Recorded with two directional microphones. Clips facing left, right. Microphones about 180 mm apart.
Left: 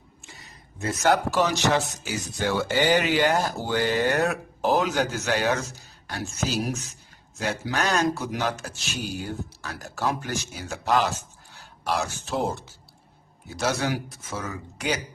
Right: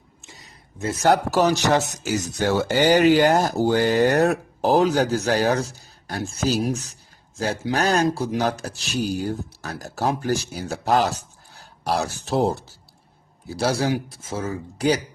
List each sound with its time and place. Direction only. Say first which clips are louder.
0.9 s a man's voice: right 3 dB; 35° right (ahead or behind)